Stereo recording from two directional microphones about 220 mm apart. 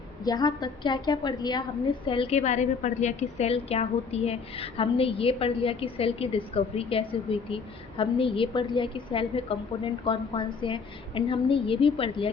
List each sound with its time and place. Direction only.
0.3 s a woman's voice: 15° left (ahead or behind)